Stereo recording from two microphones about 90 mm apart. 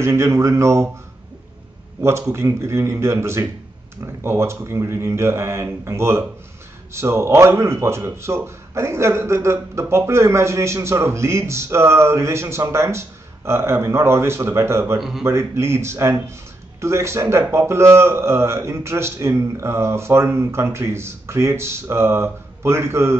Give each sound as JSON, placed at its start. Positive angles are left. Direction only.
{"t": 0.0, "sound": "a man's voice", "side_deg": -30}
{"t": 2.0, "sound": "a man's voice", "side_deg": -30}
{"t": 15.0, "sound": "speech", "side_deg": -5}
{"t": 15.2, "sound": "a man's voice", "side_deg": -30}